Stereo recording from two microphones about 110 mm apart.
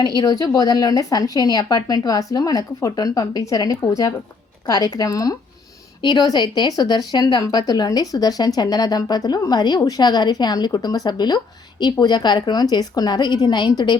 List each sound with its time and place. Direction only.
0.2 s speech: 35° left (ahead or behind)